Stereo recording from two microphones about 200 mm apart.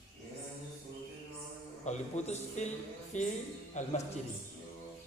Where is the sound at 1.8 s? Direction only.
35° left (ahead or behind).